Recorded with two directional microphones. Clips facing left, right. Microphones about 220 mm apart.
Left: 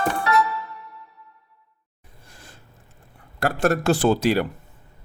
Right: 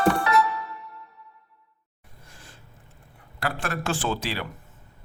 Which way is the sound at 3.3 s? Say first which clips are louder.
Left 9 dB; 45° left (ahead or behind).